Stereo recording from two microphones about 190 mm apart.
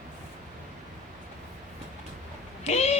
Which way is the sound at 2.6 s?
35° left (ahead or behind).